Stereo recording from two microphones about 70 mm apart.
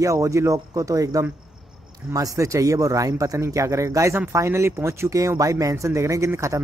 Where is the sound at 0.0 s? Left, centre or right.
Right.